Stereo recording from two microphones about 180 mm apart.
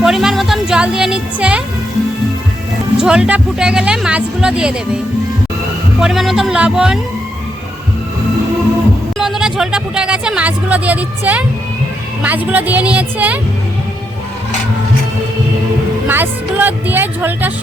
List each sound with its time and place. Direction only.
0.0 s speech: 5° right (ahead or behind)
3.0 s speech: 5° right (ahead or behind)
6.0 s speech: centre (ahead or behind)
9.1 s speech: centre (ahead or behind)
16.0 s speech: 10° right (ahead or behind)